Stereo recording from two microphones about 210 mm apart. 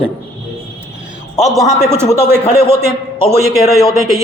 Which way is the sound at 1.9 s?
10° right (ahead or behind).